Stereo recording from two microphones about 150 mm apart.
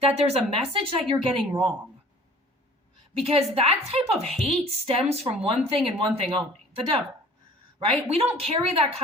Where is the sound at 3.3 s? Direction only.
40° right (ahead or behind).